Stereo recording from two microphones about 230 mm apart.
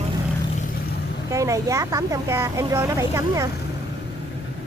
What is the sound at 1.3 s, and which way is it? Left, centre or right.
Speech, centre.